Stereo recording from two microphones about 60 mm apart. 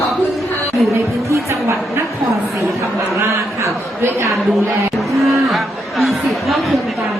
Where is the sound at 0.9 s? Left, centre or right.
Right.